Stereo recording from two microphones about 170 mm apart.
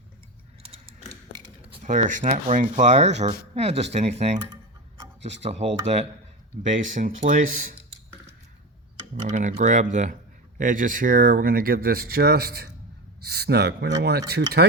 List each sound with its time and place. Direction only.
0.6 s typing: 35° right (ahead or behind)
1.9 s speech: 50° right (ahead or behind)
5.2 s speech: 40° right (ahead or behind)
9.3 s speech: 45° right (ahead or behind); by 14.6 s 70° right (ahead or behind)